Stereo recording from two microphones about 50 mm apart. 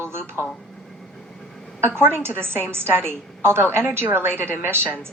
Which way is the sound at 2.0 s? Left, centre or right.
Right.